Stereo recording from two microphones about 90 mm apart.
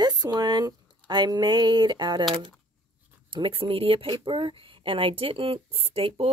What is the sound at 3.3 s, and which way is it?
Speech, 80° right.